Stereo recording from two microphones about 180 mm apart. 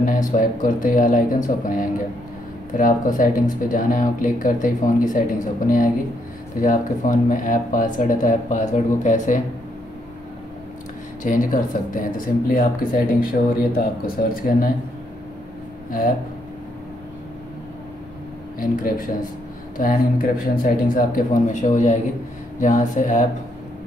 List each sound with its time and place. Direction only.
0.0 s speech: 50° left (ahead or behind)
11.2 s speech: 45° left (ahead or behind)
18.6 s speech: 50° left (ahead or behind)